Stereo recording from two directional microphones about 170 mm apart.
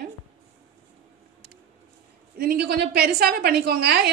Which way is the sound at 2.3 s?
65° right (ahead or behind).